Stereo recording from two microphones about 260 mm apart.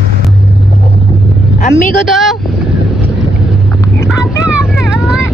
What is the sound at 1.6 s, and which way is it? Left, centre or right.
Speech, left.